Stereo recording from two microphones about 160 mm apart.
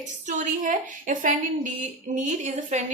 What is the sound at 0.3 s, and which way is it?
A woman's voice, 50° right (ahead or behind).